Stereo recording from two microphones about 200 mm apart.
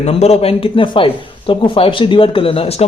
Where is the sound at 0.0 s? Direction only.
30° left (ahead or behind).